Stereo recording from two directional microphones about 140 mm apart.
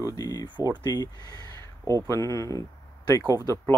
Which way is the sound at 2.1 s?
25° left (ahead or behind).